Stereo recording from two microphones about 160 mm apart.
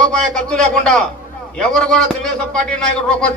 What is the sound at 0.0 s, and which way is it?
A man's voice, 5° left (ahead or behind).